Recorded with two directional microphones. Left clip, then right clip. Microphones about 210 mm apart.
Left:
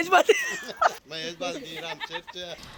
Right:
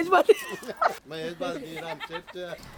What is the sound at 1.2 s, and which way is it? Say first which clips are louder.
Speech: even; 40° right (ahead or behind).